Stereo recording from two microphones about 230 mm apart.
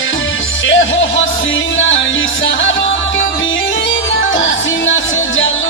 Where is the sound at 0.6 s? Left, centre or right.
Left.